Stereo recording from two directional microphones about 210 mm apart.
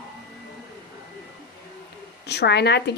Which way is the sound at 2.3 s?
50° left (ahead or behind).